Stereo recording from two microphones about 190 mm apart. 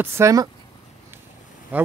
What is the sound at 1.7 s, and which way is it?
Speech, 10° right (ahead or behind).